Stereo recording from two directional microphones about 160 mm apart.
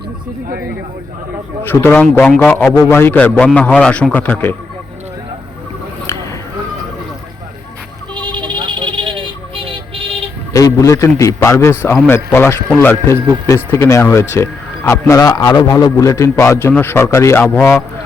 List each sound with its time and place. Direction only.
1.6 s speech: 15° left (ahead or behind)
8.1 s a sound: 30° right (ahead or behind)
10.5 s a man's voice: 20° left (ahead or behind)